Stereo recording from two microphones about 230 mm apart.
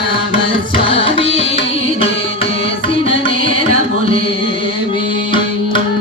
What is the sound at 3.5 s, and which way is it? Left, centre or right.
Music, right.